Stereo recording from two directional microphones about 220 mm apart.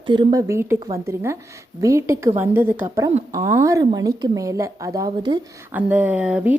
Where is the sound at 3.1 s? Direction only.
35° right (ahead or behind).